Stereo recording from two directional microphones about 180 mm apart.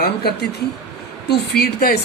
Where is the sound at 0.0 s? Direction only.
60° left (ahead or behind).